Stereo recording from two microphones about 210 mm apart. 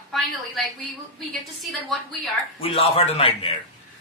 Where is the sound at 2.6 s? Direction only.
25° left (ahead or behind).